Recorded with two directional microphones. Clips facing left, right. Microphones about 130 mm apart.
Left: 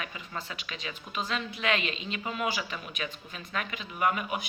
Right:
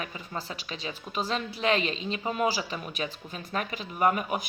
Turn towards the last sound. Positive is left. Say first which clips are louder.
# right 3 dB
turn(degrees=-40)  # may be behind; listen again after turning